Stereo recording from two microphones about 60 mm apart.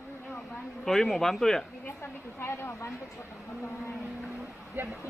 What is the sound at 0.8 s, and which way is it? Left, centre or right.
Speech, centre.